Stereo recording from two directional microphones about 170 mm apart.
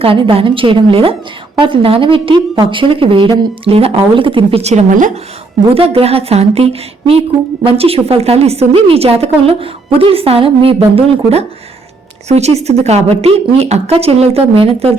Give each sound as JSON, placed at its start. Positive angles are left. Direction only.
{"t": 0.0, "sound": "a woman's voice", "side_deg": -35}
{"t": 5.7, "sound": "a woman's voice", "side_deg": -35}